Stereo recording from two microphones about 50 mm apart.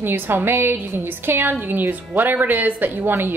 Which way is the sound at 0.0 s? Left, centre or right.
Right.